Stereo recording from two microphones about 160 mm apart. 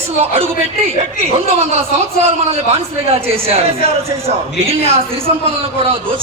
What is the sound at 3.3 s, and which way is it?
A man's voice, 40° right (ahead or behind).